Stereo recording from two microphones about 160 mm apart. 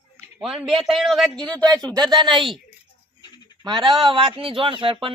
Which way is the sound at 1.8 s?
25° right (ahead or behind).